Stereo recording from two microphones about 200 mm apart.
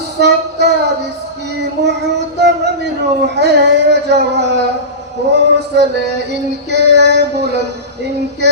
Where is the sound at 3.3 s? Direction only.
55° right (ahead or behind).